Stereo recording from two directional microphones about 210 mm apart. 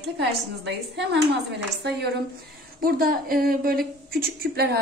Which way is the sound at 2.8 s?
45° right (ahead or behind).